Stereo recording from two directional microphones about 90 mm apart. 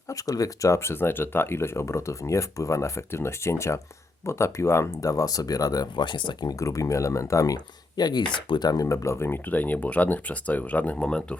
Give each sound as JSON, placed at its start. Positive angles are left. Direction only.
{"t": 0.1, "sound": "speech", "side_deg": 40}
{"t": 6.5, "sound": "speech", "side_deg": 35}